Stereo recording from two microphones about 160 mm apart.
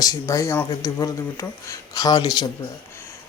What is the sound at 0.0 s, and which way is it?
Speech, 20° left (ahead or behind).